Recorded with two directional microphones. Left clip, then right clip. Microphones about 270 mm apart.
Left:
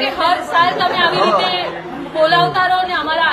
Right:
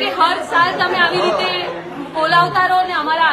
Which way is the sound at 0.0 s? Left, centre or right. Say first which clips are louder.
Even; centre.